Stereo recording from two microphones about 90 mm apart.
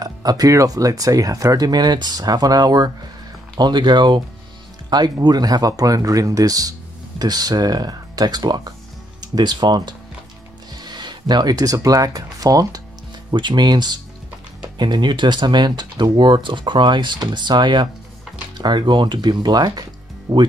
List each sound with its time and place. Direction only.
0.0 s speech: 45° right (ahead or behind)
13.3 s speech: 55° right (ahead or behind)